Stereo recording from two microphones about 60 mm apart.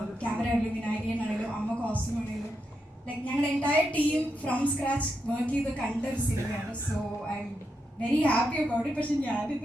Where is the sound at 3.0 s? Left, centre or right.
Left.